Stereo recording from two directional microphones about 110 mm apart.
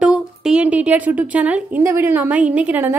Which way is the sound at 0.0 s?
5° right (ahead or behind).